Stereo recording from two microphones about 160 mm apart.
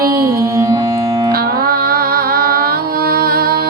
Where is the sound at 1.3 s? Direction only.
70° right (ahead or behind).